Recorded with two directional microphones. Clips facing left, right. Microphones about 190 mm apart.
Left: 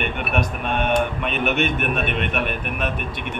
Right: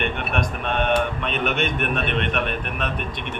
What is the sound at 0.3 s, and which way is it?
A man's voice, 5° left (ahead or behind).